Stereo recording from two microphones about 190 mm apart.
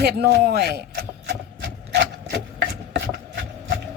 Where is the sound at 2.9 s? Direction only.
65° right (ahead or behind).